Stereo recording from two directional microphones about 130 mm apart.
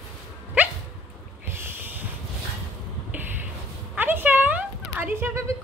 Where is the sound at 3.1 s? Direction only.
15° right (ahead or behind).